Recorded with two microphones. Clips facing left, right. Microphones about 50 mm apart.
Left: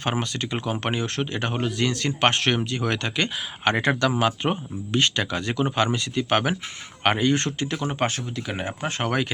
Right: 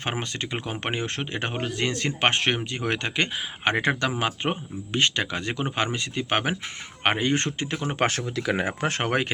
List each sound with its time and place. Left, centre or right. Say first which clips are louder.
0.0 s speech: left 3 dB; right
8.0 s speech: right 2 dB; right
8.4 s speech: right 6 dB; right